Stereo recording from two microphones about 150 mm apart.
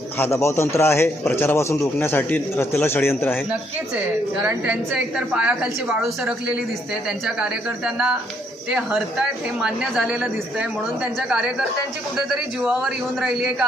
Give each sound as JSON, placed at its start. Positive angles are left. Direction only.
{"t": 0.2, "sound": "a man's voice", "side_deg": 20}
{"t": 4.4, "sound": "a woman's voice", "side_deg": -10}
{"t": 7.3, "sound": "speech", "side_deg": -5}